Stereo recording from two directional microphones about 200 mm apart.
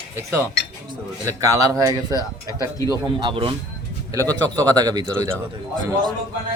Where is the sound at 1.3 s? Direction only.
15° right (ahead or behind).